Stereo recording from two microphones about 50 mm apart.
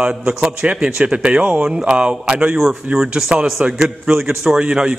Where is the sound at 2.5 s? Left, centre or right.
Centre.